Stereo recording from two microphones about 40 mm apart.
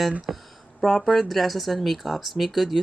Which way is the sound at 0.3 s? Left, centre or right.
Centre.